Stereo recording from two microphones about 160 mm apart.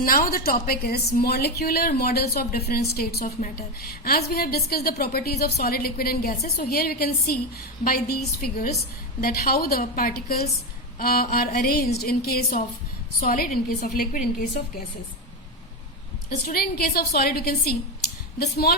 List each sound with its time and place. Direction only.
0.0 s a woman's voice: 65° left (ahead or behind)
3.2 s a woman's voice: 55° left (ahead or behind); by 12.5 s 75° left (ahead or behind)
13.1 s a woman's voice: 60° left (ahead or behind)
16.5 s a woman's voice: 70° left (ahead or behind)